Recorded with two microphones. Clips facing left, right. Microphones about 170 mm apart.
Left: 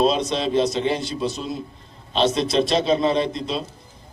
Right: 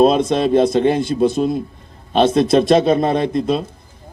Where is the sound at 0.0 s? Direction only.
55° right (ahead or behind).